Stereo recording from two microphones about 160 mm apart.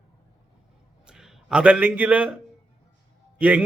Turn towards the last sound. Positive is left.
turn(degrees=-5)  # may be behind; listen again after turning